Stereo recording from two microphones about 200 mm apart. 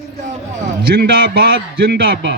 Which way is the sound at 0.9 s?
55° right (ahead or behind).